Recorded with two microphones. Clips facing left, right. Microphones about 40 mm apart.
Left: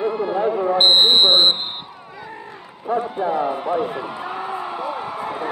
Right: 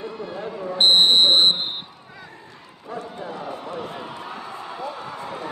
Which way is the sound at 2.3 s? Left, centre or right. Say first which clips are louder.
Left 7 dB; left.